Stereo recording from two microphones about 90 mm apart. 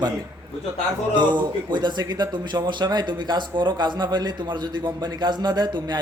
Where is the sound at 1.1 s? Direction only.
55° right (ahead or behind).